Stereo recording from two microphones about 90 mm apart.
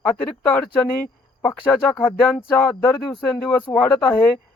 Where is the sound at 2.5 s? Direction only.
25° left (ahead or behind).